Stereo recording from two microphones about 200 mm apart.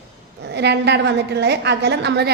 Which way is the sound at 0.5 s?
55° right (ahead or behind).